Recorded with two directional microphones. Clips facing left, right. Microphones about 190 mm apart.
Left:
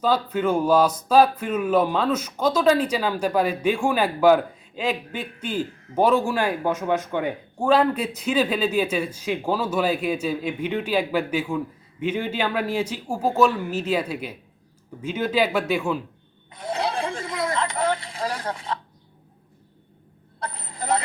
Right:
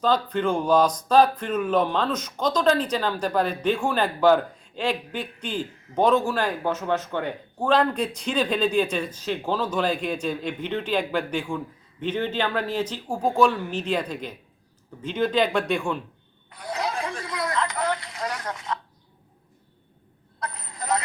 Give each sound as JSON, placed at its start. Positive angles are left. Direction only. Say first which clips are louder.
{"t": 0.0, "sound": "speech", "louder": "left 1 dB", "side_deg": 5}
{"t": 16.5, "sound": "a sound", "louder": "left 3 dB", "side_deg": 25}
{"t": 20.4, "sound": "vehicle", "louder": "left 2 dB", "side_deg": 30}